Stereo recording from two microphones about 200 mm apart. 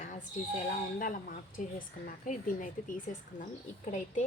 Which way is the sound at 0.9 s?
45° left (ahead or behind).